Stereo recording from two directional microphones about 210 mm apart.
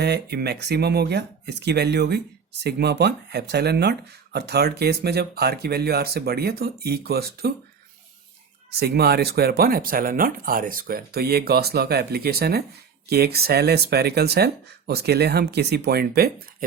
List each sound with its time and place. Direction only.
0.0 s speech: 50° right (ahead or behind)
8.8 s speech: 50° right (ahead or behind)